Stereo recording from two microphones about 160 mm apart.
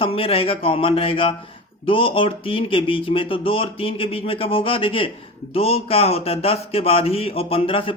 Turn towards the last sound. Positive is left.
turn(degrees=35)  # may be behind; listen again after turning